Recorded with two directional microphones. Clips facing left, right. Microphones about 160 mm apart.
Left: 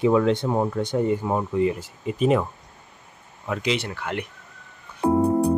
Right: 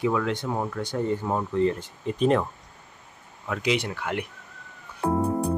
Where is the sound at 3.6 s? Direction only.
10° right (ahead or behind).